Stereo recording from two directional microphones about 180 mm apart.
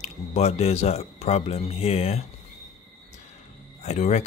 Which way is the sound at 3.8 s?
40° left (ahead or behind).